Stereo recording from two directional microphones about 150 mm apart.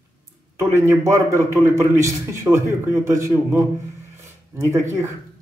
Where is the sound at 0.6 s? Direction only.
20° right (ahead or behind).